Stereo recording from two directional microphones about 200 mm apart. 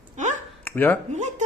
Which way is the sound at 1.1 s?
35° right (ahead or behind).